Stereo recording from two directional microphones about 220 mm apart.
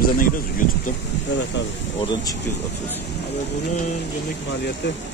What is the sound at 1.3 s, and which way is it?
Speech, 55° left (ahead or behind).